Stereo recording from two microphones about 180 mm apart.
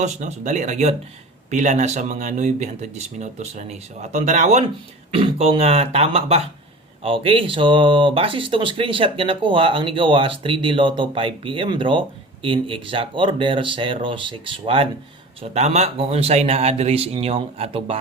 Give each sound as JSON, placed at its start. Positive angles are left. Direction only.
{"t": 0.0, "sound": "speech", "side_deg": -40}